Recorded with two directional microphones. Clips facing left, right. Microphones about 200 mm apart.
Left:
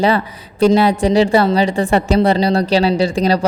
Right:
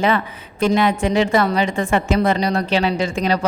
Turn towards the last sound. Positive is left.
turn(degrees=35)  # may be behind; listen again after turning